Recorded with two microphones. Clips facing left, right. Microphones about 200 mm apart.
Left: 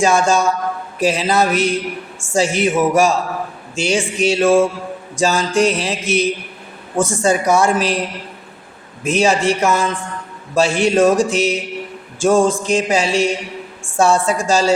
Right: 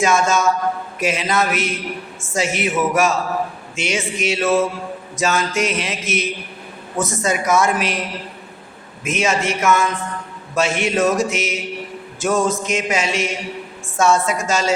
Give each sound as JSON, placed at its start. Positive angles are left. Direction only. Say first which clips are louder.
{"t": 0.0, "sound": "mantra", "louder": "left 2 dB", "side_deg": 30}
{"t": 4.2, "sound": "music", "louder": "left 5 dB", "side_deg": 30}
{"t": 5.1, "sound": "mantra", "louder": "left 4 dB", "side_deg": 30}
{"t": 9.0, "sound": "mantra", "louder": "left 5 dB", "side_deg": 35}